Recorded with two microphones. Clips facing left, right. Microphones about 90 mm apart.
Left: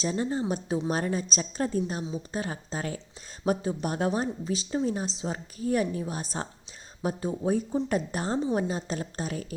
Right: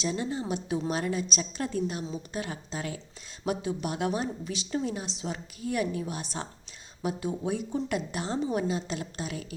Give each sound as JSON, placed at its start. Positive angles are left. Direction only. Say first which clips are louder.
{"t": 0.0, "sound": "speech", "louder": "left 3 dB", "side_deg": 35}